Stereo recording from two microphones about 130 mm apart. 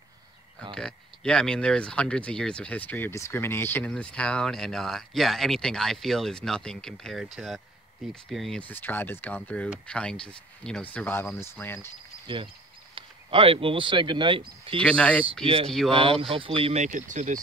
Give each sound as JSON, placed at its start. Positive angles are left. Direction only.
{"t": 0.7, "sound": "speech", "side_deg": 5}
{"t": 8.5, "sound": "speech", "side_deg": 15}
{"t": 12.9, "sound": "speech", "side_deg": -45}
{"t": 14.8, "sound": "speech", "side_deg": 10}
{"t": 15.4, "sound": "speech", "side_deg": -45}
{"t": 16.8, "sound": "speech", "side_deg": -70}